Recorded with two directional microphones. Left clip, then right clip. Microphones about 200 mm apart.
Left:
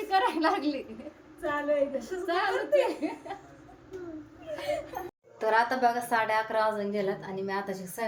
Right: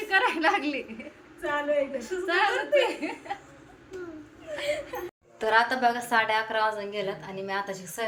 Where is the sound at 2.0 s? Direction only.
15° right (ahead or behind).